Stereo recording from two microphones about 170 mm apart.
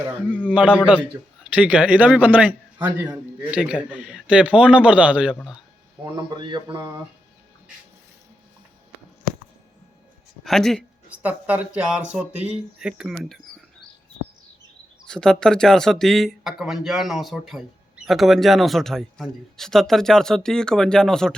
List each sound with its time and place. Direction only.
0.3 s a man's voice: 10° left (ahead or behind)
0.5 s a man's voice: 5° right (ahead or behind)
6.1 s a man's voice: 25° right (ahead or behind)
10.4 s a man's voice: centre (ahead or behind)
11.1 s a man's voice: 10° right (ahead or behind)
15.0 s a man's voice: 5° left (ahead or behind)